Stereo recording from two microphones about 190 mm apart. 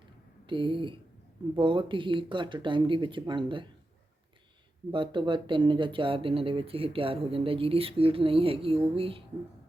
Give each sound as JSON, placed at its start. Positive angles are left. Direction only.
{"t": 0.4, "sound": "speech", "side_deg": -25}
{"t": 4.9, "sound": "speech", "side_deg": -25}